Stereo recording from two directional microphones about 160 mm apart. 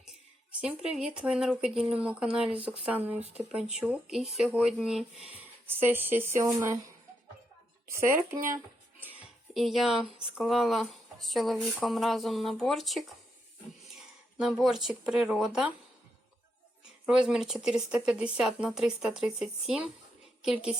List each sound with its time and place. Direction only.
0.6 s speech: 5° right (ahead or behind)
7.9 s speech: 15° right (ahead or behind)
9.6 s speech: centre (ahead or behind)
14.3 s speech: centre (ahead or behind)
17.1 s speech: 5° right (ahead or behind)